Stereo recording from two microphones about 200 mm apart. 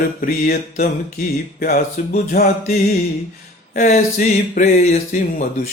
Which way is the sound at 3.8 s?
40° left (ahead or behind).